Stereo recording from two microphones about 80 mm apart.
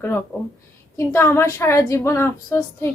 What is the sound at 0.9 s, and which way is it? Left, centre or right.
A woman's voice, left.